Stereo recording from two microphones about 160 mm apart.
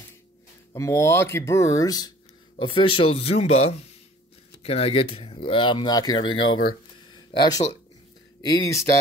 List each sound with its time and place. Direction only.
0.7 s speech: 15° left (ahead or behind); by 3.5 s 40° left (ahead or behind)
4.6 s speech: 40° left (ahead or behind)